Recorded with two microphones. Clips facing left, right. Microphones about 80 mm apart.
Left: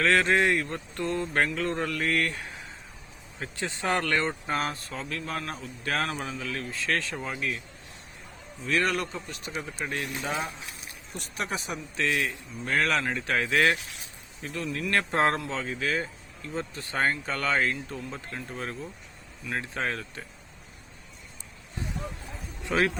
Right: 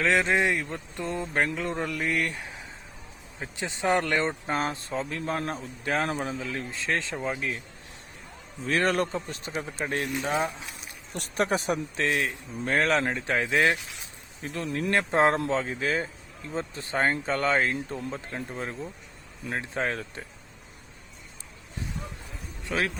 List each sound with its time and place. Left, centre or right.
0.0 s mantra: centre
3.4 s speech: centre
8.6 s a man's voice: right
11.2 s a man's voice: right; by 13.7 s centre
14.4 s speech: right
15.4 s a man's voice: right
22.6 s a man's voice: centre